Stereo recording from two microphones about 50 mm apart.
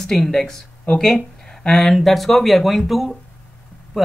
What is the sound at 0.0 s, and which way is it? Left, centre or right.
Speech, centre.